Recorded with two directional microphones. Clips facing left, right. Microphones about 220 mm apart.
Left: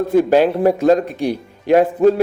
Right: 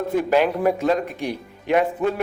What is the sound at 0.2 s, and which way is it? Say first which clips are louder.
Speech: left 6 dB; 35° left (ahead or behind).